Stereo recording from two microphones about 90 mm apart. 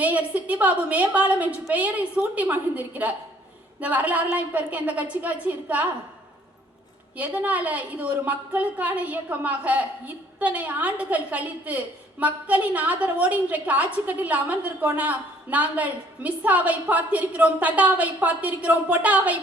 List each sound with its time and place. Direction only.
0.0 s a woman's voice: 15° right (ahead or behind)
7.2 s a woman's voice: 15° right (ahead or behind)